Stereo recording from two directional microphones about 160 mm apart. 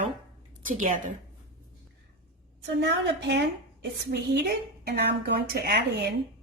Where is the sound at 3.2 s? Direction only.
90° right.